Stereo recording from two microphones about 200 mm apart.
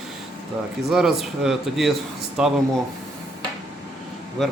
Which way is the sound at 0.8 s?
Centre (ahead or behind).